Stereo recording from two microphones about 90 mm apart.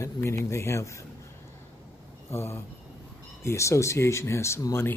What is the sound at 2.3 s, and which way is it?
Speech, 25° left (ahead or behind).